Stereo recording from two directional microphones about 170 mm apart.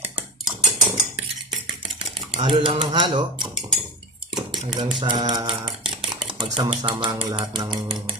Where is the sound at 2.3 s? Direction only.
30° right (ahead or behind).